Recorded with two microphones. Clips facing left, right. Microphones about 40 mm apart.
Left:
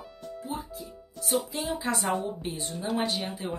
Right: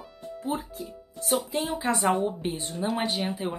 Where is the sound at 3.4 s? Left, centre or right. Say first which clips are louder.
Right 2 dB; right.